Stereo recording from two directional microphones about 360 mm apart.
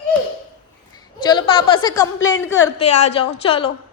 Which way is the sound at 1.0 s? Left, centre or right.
Centre.